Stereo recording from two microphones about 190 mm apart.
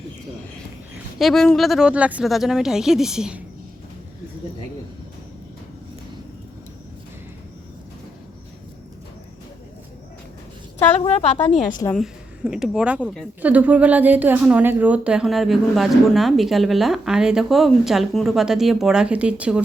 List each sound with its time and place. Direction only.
1.2 s a woman's voice: centre (ahead or behind)
11.0 s a woman's voice: 30° left (ahead or behind)
11.9 s a woman's voice: 5° right (ahead or behind)